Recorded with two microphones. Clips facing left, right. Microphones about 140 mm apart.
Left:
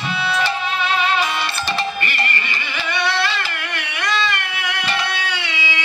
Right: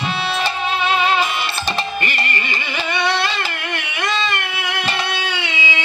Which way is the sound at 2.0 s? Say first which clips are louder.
Right 1 dB; 20° right (ahead or behind).